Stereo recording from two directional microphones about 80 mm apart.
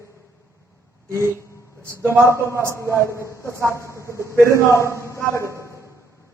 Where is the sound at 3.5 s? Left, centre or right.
Right.